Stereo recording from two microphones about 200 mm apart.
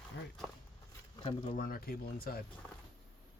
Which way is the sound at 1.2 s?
30° left (ahead or behind).